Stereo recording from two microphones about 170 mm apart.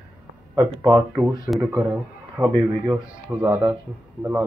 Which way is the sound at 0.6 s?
20° right (ahead or behind).